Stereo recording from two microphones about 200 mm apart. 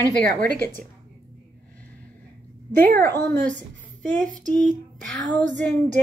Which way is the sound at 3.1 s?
15° left (ahead or behind).